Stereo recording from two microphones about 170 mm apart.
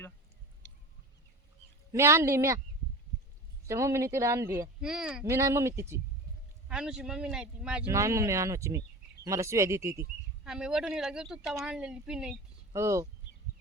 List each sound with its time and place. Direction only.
1.9 s speech: 15° right (ahead or behind)
3.7 s speech: 15° right (ahead or behind)
4.8 s speech: 5° right (ahead or behind)
5.2 s speech: 20° right (ahead or behind)
6.7 s speech: 5° right (ahead or behind)
7.9 s speech: 15° right (ahead or behind)
10.4 s speech: 5° right (ahead or behind)
12.7 s speech: 15° right (ahead or behind)